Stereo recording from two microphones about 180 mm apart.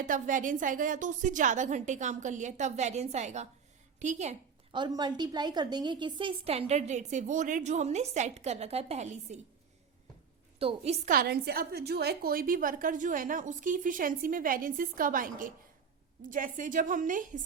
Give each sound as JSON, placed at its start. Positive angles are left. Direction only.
{"t": 0.0, "sound": "a woman's voice", "side_deg": -45}
{"t": 4.7, "sound": "a woman's voice", "side_deg": -25}
{"t": 10.6, "sound": "a woman's voice", "side_deg": -35}
{"t": 11.1, "sound": "a woman's voice", "side_deg": -55}